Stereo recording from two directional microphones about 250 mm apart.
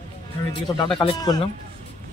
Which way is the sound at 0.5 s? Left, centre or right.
Centre.